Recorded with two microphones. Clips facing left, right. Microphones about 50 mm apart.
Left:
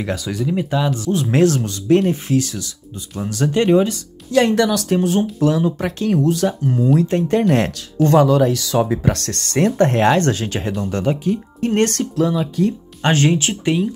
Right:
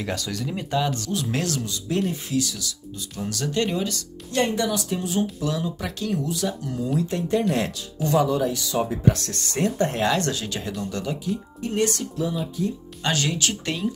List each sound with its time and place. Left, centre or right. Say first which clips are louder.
0.0 s speech: left 6 dB; centre
1.1 s speech: left 10 dB; left
3.3 s speech: left 9 dB; left
4.4 s speech: left 8 dB; left
4.9 s speech: left 8 dB; left
8.3 s speech: left 8 dB; left
12.2 s speech: left 9 dB; left
13.0 s speech: left 8 dB; left